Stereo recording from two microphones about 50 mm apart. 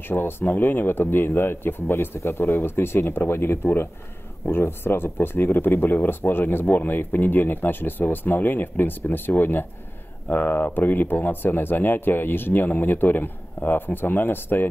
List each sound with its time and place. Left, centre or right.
0.1 s speech: left
2.1 s speech: left